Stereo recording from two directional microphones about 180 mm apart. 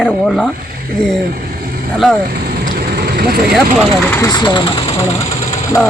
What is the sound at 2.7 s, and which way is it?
Vehicle, 60° right (ahead or behind).